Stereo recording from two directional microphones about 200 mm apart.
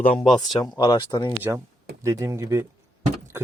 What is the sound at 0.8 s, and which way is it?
Speech, 20° left (ahead or behind).